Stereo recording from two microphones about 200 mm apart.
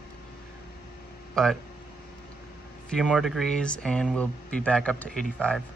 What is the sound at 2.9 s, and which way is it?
Speech, centre (ahead or behind).